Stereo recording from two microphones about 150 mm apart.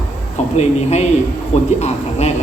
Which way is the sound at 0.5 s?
45° left (ahead or behind).